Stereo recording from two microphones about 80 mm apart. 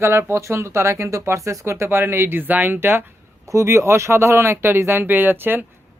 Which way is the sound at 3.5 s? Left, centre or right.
Right.